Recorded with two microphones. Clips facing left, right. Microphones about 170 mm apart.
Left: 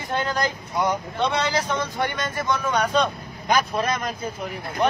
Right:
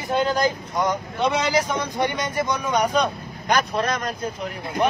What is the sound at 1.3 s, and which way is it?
Speech, 10° right (ahead or behind).